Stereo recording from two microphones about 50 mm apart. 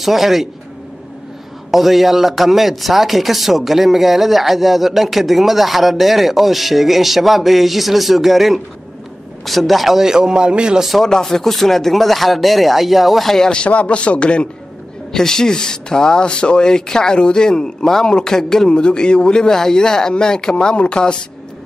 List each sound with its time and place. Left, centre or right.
0.0 s speech: centre
1.7 s speech: centre
10.9 s speech: centre
13.7 s a man's voice: left
15.1 s speech: centre